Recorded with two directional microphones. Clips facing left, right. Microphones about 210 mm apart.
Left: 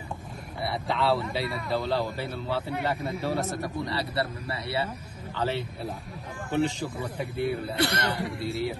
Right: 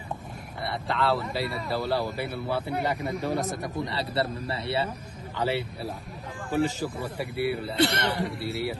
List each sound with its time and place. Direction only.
0.7 s a man's voice: centre (ahead or behind)
3.0 s speech: centre (ahead or behind)
3.3 s a man's voice: 15° right (ahead or behind)
5.4 s a man's voice: 10° right (ahead or behind)
7.7 s a man's voice: 25° right (ahead or behind)
8.2 s speech: centre (ahead or behind)